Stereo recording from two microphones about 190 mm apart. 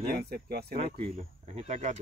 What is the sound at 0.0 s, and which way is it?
Speech, 55° right (ahead or behind).